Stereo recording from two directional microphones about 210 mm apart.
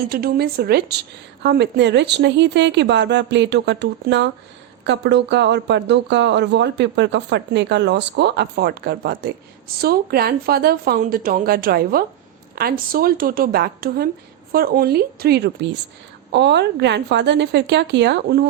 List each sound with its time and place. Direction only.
0.1 s speech: 45° right (ahead or behind)